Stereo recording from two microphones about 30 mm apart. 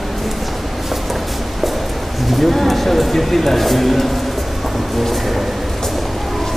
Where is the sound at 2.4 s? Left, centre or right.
Centre.